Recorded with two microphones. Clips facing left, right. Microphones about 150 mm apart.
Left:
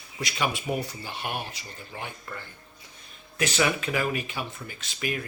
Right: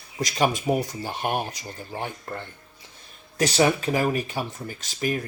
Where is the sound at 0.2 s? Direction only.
40° right (ahead or behind).